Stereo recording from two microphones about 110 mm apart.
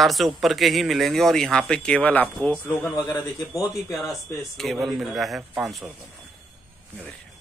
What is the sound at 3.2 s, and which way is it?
Speech, 30° left (ahead or behind).